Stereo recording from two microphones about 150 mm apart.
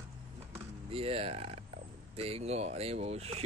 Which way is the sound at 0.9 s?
40° right (ahead or behind).